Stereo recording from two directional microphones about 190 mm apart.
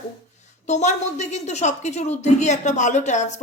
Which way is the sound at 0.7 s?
35° left (ahead or behind).